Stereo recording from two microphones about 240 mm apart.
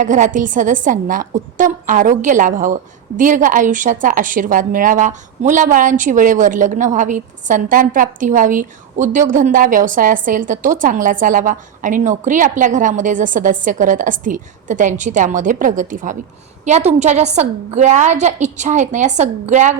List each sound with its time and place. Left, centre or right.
0.0 s a woman's voice: right